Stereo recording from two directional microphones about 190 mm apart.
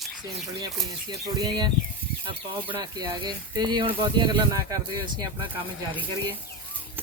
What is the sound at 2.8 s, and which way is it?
Speech, 20° right (ahead or behind).